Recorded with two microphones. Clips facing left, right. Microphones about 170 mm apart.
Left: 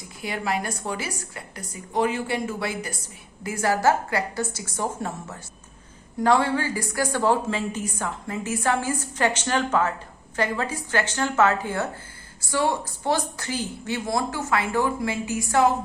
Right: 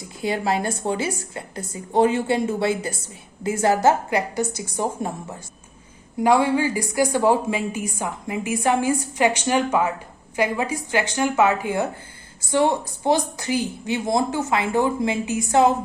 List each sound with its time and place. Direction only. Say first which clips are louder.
0.2 s a woman's voice: right 5 dB; 25° right (ahead or behind)